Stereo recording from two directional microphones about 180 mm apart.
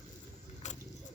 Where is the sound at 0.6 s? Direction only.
40° left (ahead or behind).